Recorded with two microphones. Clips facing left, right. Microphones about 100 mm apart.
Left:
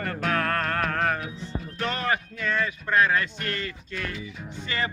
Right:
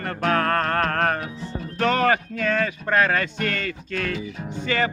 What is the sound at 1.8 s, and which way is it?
Speech, 70° right (ahead or behind).